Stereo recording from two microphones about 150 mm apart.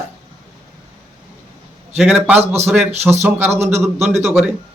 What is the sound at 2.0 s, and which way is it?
A man's voice, 10° right (ahead or behind).